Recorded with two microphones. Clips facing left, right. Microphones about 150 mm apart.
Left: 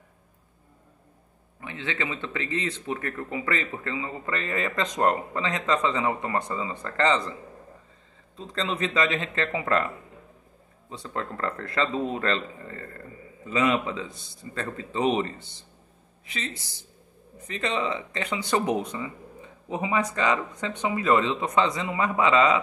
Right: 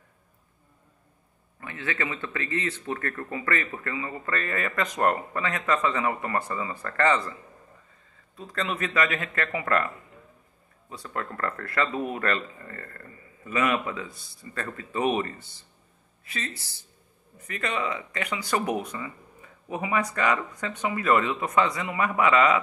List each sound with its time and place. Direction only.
1.6 s speech: 20° left (ahead or behind)
8.4 s speech: 25° left (ahead or behind)